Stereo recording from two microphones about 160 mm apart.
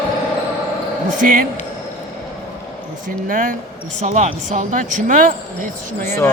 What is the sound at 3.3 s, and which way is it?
Speech, 60° right (ahead or behind).